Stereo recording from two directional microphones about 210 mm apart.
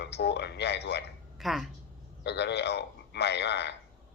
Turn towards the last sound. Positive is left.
turn(degrees=55)  # may be behind; listen again after turning